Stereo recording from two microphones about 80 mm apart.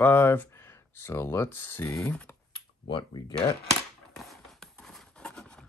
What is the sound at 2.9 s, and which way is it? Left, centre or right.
Speech, left.